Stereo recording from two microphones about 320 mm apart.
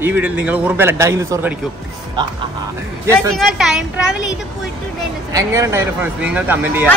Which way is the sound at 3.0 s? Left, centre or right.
Centre.